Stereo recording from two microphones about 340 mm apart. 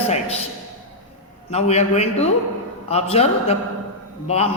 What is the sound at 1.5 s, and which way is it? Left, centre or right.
A man's voice, centre.